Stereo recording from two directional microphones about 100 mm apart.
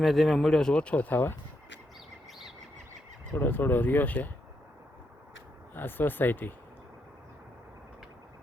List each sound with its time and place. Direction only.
0.0 s speech: centre (ahead or behind); by 1.4 s 20° left (ahead or behind)
3.3 s speech: 20° left (ahead or behind)
5.7 s speech: 20° left (ahead or behind)